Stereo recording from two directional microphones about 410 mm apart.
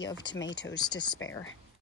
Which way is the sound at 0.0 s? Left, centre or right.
Left.